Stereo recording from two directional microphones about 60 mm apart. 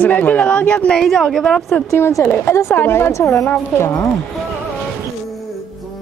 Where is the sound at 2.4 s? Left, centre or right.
Left.